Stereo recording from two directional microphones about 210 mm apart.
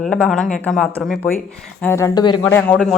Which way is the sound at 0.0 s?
Centre (ahead or behind).